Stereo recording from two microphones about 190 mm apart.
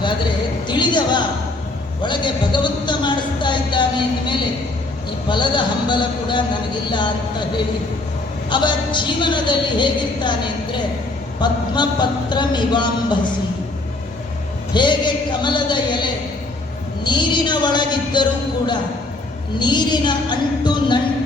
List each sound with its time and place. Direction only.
0.7 s a sound: 25° left (ahead or behind)
2.0 s a woman's voice: 25° left (ahead or behind)
5.3 s a woman's voice: 25° left (ahead or behind)
8.4 s a woman's voice: 25° left (ahead or behind)
14.7 s a woman's voice: 25° left (ahead or behind)